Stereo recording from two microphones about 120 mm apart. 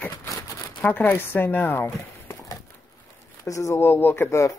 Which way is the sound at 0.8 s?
15° left (ahead or behind).